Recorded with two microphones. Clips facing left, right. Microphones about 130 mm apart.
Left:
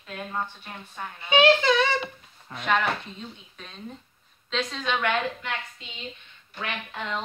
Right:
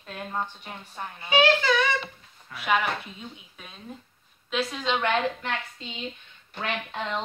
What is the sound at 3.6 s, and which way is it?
Speech, 5° right (ahead or behind).